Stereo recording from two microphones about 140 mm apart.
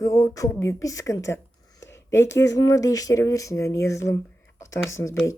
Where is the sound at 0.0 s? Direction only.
20° left (ahead or behind).